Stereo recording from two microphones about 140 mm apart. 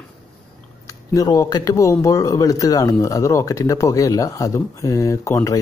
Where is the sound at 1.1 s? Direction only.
25° left (ahead or behind).